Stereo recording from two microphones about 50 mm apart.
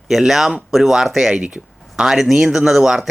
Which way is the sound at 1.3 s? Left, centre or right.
Centre.